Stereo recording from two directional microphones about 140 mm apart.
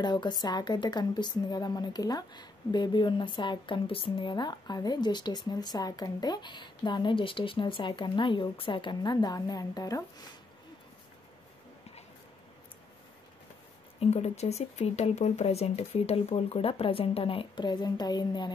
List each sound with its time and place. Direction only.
0.0 s a woman's voice: 30° left (ahead or behind)
13.9 s speech: 50° left (ahead or behind); by 18.5 s 30° left (ahead or behind)